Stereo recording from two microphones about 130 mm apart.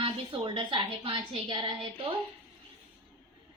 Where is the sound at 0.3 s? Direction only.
35° right (ahead or behind).